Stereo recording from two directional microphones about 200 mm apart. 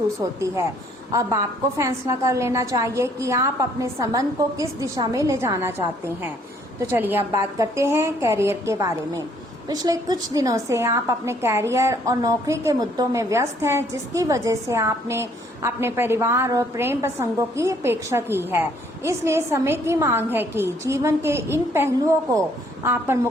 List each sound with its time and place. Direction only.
0.2 s a woman's voice: 15° right (ahead or behind)
1.8 s a woman's voice: 15° right (ahead or behind)